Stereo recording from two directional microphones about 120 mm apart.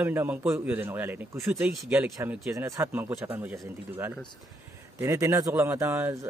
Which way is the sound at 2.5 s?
25° right (ahead or behind).